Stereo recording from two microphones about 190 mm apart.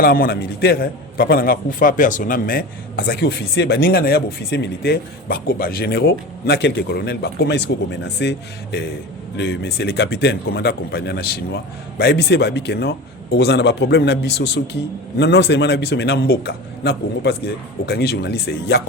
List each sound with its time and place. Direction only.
0.0 s a man's voice: 50° left (ahead or behind)